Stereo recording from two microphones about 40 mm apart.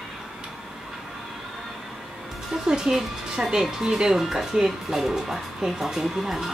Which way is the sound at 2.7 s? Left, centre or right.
Centre.